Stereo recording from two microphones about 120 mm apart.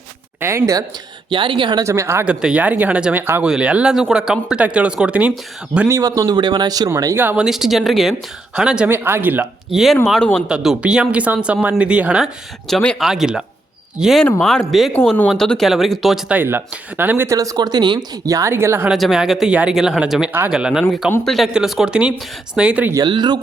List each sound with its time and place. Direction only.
0.3 s speech: 20° right (ahead or behind)
1.3 s speech: 45° right (ahead or behind)
1.8 s speech: 25° right (ahead or behind)
2.2 s speech: 10° right (ahead or behind)
5.9 s speech: 30° right (ahead or behind)
7.4 s speech: 5° right (ahead or behind)
8.9 s speech: 20° right (ahead or behind)
9.7 s speech: centre (ahead or behind)
12.6 s speech: 5° left (ahead or behind)
16.3 s speech: 15° right (ahead or behind)
17.3 s speech: 30° right (ahead or behind)
18.9 s speech: centre (ahead or behind)
23.0 s speech: 40° right (ahead or behind)